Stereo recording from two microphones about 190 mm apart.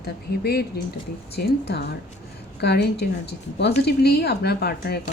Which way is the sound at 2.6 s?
60° left (ahead or behind).